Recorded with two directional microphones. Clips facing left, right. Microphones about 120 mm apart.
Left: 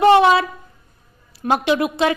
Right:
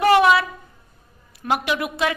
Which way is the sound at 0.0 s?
25° left (ahead or behind).